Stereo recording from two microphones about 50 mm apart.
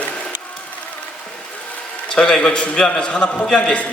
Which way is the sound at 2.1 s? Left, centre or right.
Centre.